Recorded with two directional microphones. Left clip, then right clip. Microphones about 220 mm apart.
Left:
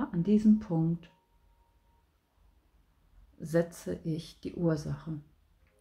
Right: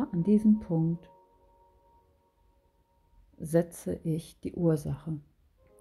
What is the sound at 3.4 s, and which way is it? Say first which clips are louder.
Speech: right 2 dB; 25° right (ahead or behind).